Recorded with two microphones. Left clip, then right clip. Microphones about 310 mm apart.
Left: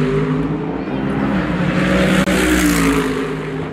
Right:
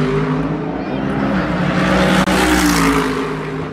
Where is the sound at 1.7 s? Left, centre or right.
Centre.